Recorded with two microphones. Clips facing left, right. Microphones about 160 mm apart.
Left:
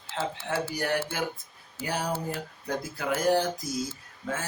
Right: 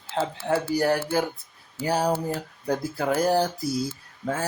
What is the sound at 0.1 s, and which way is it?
Speech, 35° right (ahead or behind).